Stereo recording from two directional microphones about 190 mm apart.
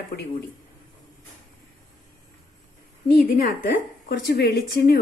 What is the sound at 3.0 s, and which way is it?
A woman's voice, 50° left (ahead or behind).